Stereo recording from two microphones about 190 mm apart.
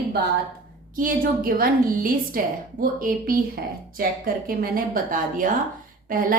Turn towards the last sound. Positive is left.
turn(degrees=-50)  # may be behind; listen again after turning